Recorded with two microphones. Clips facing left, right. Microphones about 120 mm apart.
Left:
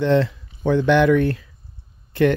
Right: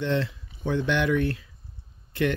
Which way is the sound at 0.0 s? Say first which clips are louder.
Left 9 dB; 90° left.